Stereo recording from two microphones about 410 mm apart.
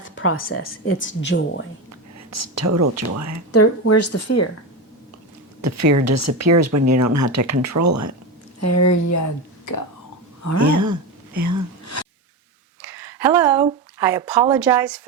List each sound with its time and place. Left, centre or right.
0.0 s speech: left
1.9 s speech: right
3.5 s speech: left
5.6 s speech: right
8.6 s speech: left
10.6 s a sound: right
12.8 s a sound: centre